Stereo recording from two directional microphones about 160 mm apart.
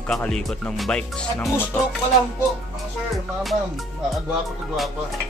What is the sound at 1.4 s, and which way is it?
Music, 15° left (ahead or behind).